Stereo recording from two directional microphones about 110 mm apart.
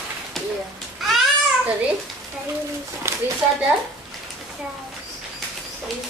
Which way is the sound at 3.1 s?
25° right (ahead or behind).